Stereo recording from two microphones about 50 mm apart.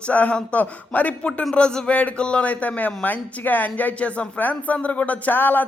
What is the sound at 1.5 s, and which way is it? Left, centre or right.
Speech, centre.